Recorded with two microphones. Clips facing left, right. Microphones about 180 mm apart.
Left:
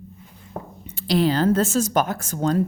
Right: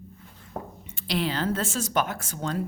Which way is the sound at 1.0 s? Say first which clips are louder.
Left 8 dB; 40° left (ahead or behind).